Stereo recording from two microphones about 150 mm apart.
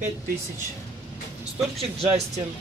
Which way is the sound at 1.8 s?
40° right (ahead or behind).